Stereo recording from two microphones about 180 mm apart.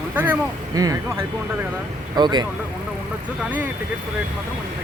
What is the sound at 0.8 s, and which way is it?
Speech, 20° right (ahead or behind).